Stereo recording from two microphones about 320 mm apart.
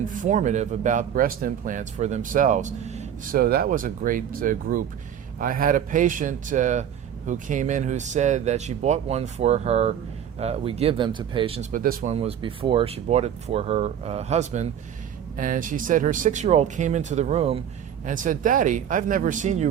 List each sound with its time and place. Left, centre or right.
0.0 s speech: right